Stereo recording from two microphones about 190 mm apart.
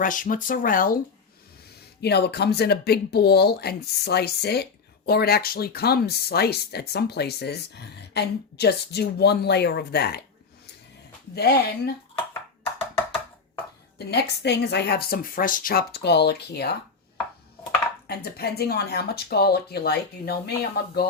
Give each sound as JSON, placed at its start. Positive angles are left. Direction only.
{"t": 0.0, "sound": "speech", "side_deg": 45}
{"t": 2.0, "sound": "speech", "side_deg": 60}
{"t": 11.3, "sound": "speech", "side_deg": 60}
{"t": 14.0, "sound": "speech", "side_deg": 60}
{"t": 18.1, "sound": "speech", "side_deg": 55}